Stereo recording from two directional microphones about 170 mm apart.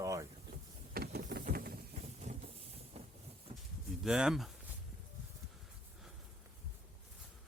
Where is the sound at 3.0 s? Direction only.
35° right (ahead or behind).